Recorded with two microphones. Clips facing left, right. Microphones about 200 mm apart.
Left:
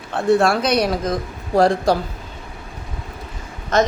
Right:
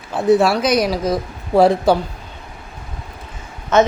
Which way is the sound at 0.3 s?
Centre (ahead or behind).